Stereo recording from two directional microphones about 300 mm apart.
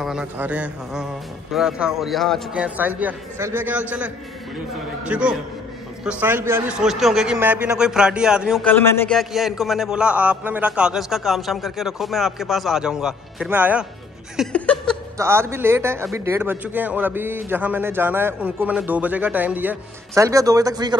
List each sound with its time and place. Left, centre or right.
0.0 s a man's voice: centre
15.1 s a man's voice: centre